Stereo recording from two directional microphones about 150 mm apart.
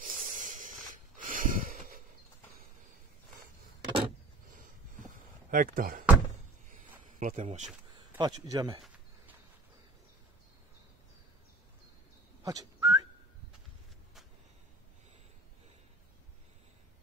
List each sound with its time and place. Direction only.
0.0 s snort: 60° right (ahead or behind)
3.8 s vehicle: 35° right (ahead or behind)
4.6 s a sound: 65° right (ahead or behind)
7.2 s speech: 55° right (ahead or behind)
8.2 s speech: 30° right (ahead or behind)
12.4 s whistling: 25° right (ahead or behind)